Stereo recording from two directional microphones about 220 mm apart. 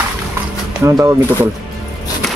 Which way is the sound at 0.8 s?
15° right (ahead or behind).